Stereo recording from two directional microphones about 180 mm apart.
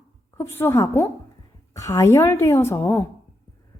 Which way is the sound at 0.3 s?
15° left (ahead or behind).